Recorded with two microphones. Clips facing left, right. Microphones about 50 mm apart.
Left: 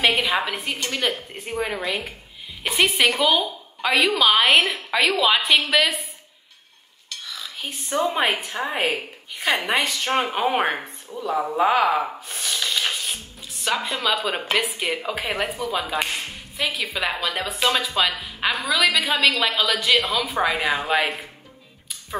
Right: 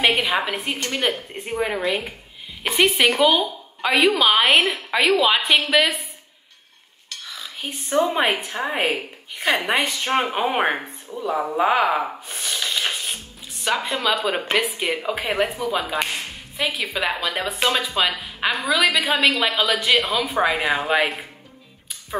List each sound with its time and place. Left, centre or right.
0.0 s a sound: centre
0.8 s a woman's voice: centre
7.3 s a woman's voice: centre
11.1 s a sound: centre
13.7 s a woman's voice: right
14.0 s a woman's voice: centre